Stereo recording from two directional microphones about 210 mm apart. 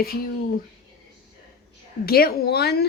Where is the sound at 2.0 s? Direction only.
45° left (ahead or behind).